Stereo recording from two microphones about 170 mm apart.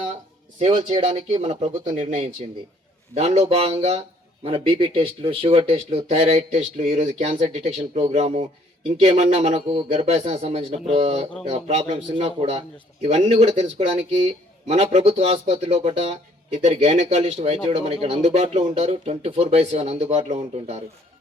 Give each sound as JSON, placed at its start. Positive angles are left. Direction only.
{"t": 0.6, "sound": "a man's voice", "side_deg": -35}